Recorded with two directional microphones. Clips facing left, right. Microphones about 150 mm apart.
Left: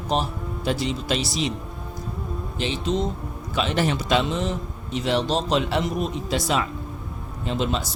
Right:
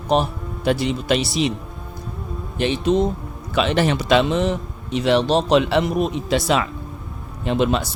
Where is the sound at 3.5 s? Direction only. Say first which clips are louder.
Right 5 dB; 75° right (ahead or behind).